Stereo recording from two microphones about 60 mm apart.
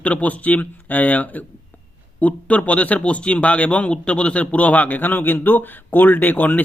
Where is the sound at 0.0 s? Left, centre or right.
Left.